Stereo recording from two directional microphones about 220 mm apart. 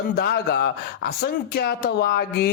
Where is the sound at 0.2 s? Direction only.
45° left (ahead or behind).